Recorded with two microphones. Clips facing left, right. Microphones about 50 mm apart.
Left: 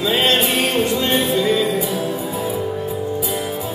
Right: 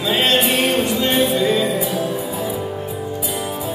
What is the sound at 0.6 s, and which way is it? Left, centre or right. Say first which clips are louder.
Music: even; right.